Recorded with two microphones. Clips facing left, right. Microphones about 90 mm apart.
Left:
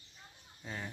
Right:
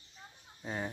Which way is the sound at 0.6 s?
25° right (ahead or behind).